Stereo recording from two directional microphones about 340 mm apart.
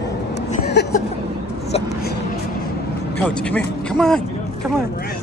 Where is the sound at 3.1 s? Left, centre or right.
Centre.